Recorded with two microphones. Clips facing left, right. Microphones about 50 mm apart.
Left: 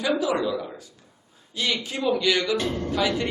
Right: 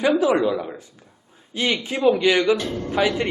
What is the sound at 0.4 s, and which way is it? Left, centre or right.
A man's voice, right.